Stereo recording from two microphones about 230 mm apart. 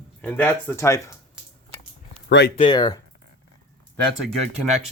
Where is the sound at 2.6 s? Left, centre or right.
Centre.